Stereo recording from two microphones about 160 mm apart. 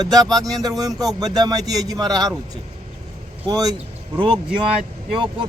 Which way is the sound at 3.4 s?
25° right (ahead or behind).